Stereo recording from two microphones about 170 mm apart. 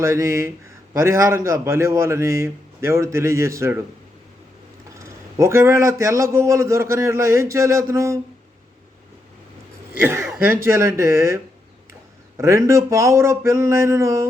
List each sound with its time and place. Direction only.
0.0 s a man's voice: 15° right (ahead or behind)
4.9 s a man's voice: 15° right (ahead or behind)
9.9 s a man's voice: 10° right (ahead or behind)
12.4 s a man's voice: 15° right (ahead or behind)